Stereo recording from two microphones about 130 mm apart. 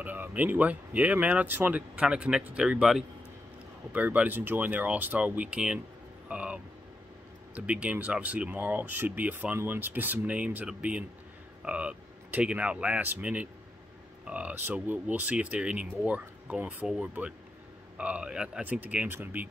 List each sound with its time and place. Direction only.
0.0 s speech: 15° right (ahead or behind)